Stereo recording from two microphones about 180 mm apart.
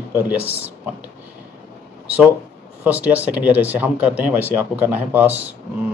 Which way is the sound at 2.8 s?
10° right (ahead or behind).